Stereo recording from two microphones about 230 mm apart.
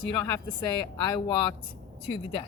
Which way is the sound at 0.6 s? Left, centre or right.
Centre.